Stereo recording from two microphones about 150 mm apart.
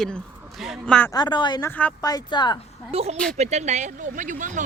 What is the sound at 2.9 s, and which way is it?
Speech, 40° right (ahead or behind).